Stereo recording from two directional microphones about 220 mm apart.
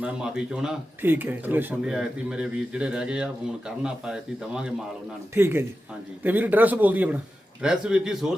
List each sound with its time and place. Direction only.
0.0 s speech: 5° right (ahead or behind)